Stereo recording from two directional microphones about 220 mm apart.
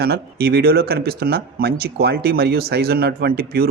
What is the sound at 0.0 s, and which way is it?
Speech, 45° right (ahead or behind).